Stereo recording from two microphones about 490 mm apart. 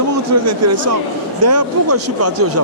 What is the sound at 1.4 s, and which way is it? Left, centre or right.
Speech, right.